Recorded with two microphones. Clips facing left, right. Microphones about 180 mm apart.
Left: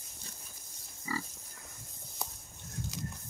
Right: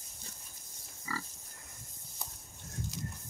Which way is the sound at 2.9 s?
85° left.